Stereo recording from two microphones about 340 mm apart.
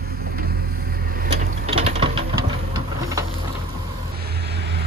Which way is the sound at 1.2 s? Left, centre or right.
Centre.